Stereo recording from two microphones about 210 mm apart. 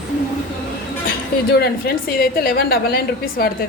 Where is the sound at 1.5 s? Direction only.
50° left (ahead or behind).